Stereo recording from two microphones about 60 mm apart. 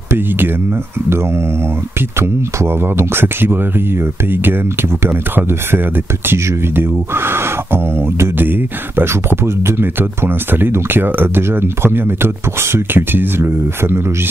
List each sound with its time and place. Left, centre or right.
2.1 s speech: right